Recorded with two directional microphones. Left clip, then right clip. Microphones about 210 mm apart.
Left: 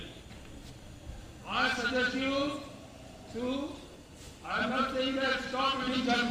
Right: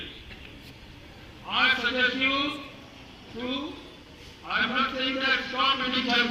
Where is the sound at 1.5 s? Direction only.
55° left (ahead or behind).